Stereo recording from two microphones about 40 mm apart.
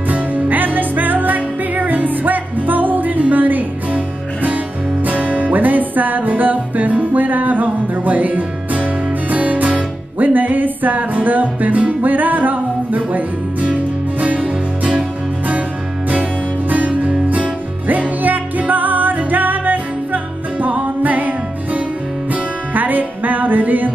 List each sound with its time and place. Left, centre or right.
0.1 s music: right
14.2 s music: right
16.1 s music: right